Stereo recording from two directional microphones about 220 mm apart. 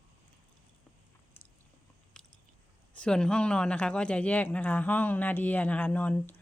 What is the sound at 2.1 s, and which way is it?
Biting, 5° left (ahead or behind).